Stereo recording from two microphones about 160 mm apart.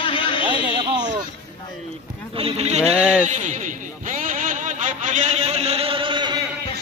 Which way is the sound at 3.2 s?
50° right (ahead or behind).